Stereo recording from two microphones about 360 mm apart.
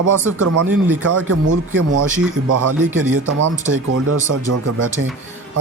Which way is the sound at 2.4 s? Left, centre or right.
Right.